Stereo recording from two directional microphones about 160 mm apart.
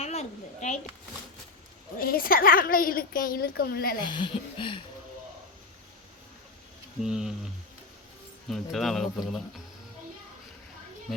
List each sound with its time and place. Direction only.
0.0 s speech: 40° left (ahead or behind)
2.0 s a woman's voice: 65° left (ahead or behind)
4.0 s speech: 30° left (ahead or behind)
7.0 s speech: 5° right (ahead or behind)
8.4 s speech: centre (ahead or behind)